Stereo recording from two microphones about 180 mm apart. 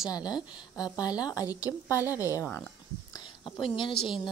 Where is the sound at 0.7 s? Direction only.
20° left (ahead or behind).